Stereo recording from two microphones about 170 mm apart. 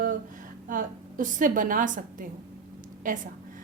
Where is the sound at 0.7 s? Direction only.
55° right (ahead or behind).